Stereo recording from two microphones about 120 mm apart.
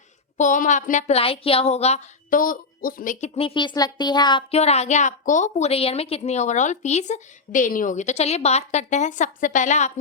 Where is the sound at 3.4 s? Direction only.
40° left (ahead or behind).